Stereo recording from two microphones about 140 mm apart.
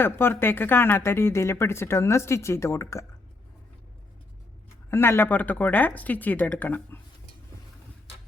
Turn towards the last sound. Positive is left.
turn(degrees=15)  # may be behind; listen again after turning